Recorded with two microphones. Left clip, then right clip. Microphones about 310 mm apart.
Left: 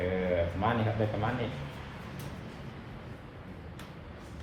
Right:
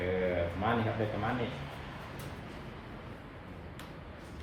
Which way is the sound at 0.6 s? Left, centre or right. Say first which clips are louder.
Even; centre.